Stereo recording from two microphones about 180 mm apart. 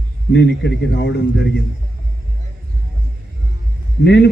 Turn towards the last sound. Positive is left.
turn(degrees=70)  # may be behind; listen again after turning